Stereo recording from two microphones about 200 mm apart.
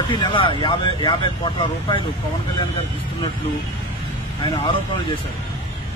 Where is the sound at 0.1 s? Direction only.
25° left (ahead or behind).